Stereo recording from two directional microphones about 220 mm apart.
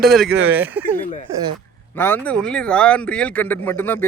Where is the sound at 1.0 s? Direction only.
35° left (ahead or behind).